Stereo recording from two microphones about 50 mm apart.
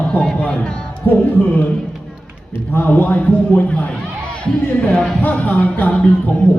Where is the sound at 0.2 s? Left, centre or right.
Centre.